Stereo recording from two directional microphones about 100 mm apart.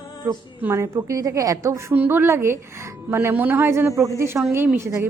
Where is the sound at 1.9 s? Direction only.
20° right (ahead or behind).